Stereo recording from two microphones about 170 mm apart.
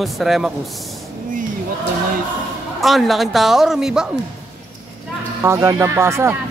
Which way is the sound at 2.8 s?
Centre (ahead or behind).